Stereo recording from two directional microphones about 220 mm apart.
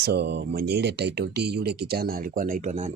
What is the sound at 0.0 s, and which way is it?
Speech, 50° right (ahead or behind).